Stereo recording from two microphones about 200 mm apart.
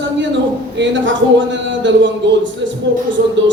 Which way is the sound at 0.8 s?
65° right (ahead or behind).